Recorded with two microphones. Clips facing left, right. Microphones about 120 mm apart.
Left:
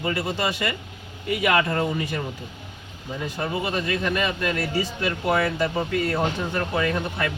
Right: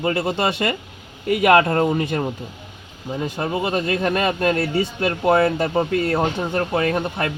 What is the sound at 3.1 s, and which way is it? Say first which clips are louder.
Speech: right 4 dB; 40° right (ahead or behind).